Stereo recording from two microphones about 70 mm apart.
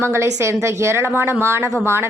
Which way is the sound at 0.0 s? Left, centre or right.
Right.